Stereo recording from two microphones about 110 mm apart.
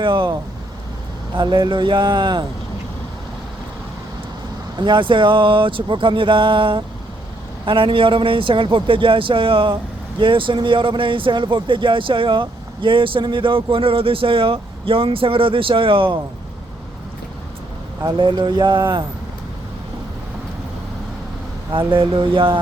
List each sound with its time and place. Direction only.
0.0 s speech: 45° right (ahead or behind)
1.4 s speech: 40° right (ahead or behind)
4.8 s speech: 45° right (ahead or behind)
18.0 s speech: 45° right (ahead or behind)
21.7 s speech: 50° right (ahead or behind)